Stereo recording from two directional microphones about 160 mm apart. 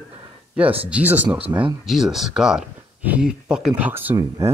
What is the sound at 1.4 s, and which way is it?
Speech, 35° right (ahead or behind).